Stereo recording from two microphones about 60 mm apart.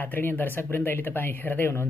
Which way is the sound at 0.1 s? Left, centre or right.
Left.